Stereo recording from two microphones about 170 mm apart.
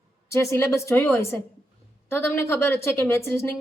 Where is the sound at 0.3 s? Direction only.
15° left (ahead or behind).